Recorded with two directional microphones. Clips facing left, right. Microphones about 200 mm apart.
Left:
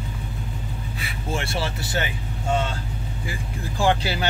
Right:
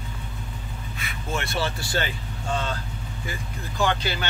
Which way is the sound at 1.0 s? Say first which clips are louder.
Left 1 dB; 30° left (ahead or behind).